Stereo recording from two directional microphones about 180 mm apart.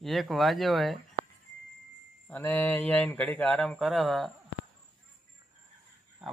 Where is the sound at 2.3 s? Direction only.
10° left (ahead or behind).